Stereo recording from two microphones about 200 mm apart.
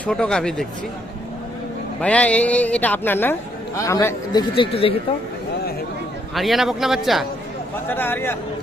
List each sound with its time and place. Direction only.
0.0 s a man's voice: 5° left (ahead or behind)
2.0 s a man's voice: 5° left (ahead or behind); by 4.9 s 30° left (ahead or behind)
6.3 s a man's voice: centre (ahead or behind)
7.9 s speech: 10° left (ahead or behind)